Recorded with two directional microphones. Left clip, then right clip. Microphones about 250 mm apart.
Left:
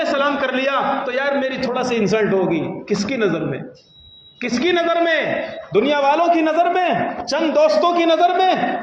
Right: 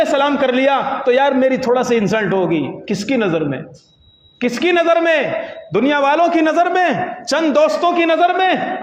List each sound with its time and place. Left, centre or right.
0.0 s a man's voice: right